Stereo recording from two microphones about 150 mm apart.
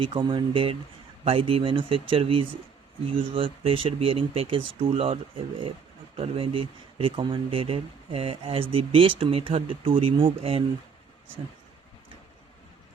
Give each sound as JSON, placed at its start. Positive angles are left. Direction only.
{"t": 0.0, "sound": "speech", "side_deg": -35}